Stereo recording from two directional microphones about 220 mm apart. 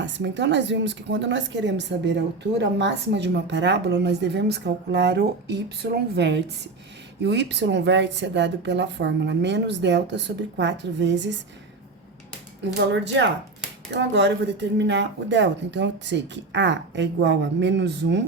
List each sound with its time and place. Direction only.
0.0 s a woman's voice: 55° right (ahead or behind)
12.7 s a woman's voice: 55° right (ahead or behind)